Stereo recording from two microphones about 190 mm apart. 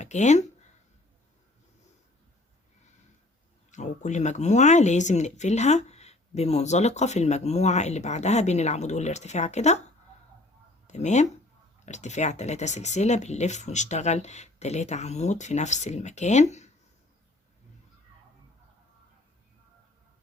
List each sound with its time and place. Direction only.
0.0 s speech: 40° left (ahead or behind)
3.7 s speech: 40° left (ahead or behind)
10.8 s speech: 35° left (ahead or behind)